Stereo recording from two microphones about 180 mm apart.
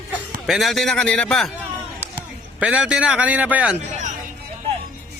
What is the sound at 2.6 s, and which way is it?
A man's voice, 5° right (ahead or behind).